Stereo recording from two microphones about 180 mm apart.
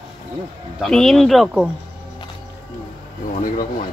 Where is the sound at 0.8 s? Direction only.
Centre (ahead or behind).